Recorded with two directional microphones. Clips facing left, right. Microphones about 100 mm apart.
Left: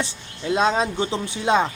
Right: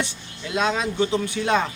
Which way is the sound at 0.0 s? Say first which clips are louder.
Left 2 dB; 30° left (ahead or behind).